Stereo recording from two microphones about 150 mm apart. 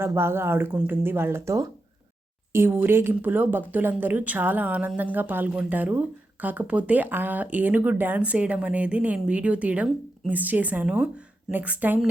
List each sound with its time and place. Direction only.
0.0 s speech: 15° right (ahead or behind)